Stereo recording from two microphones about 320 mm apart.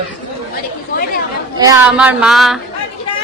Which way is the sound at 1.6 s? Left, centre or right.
Centre.